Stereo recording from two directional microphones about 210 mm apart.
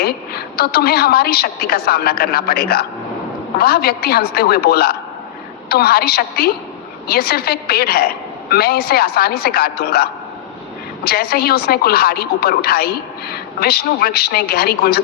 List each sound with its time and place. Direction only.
0.0 s a woman's voice: 50° left (ahead or behind)